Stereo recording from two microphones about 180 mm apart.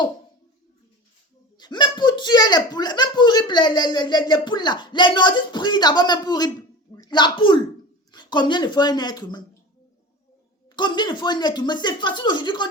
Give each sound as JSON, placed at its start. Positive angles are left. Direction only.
{"t": 1.5, "sound": "speech", "side_deg": 25}
{"t": 10.8, "sound": "speech", "side_deg": 25}